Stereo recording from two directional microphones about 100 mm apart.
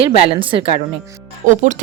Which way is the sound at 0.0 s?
65° right (ahead or behind).